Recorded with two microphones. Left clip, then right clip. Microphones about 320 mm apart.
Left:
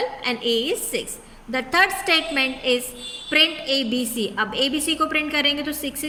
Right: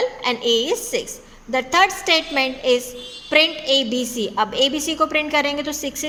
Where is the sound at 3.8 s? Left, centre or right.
Right.